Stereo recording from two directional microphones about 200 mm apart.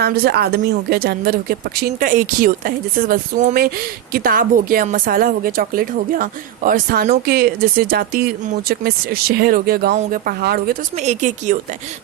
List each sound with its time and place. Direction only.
0.0 s speech: 50° right (ahead or behind)
10.9 s speech: 35° right (ahead or behind)